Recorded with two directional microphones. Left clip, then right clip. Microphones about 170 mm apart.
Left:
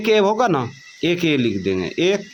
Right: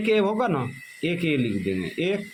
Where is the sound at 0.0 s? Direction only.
30° left (ahead or behind).